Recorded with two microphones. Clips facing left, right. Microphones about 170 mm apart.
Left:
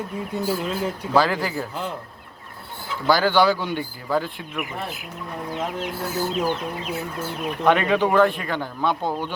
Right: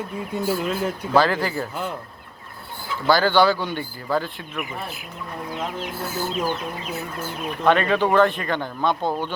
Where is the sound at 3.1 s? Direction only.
5° left (ahead or behind).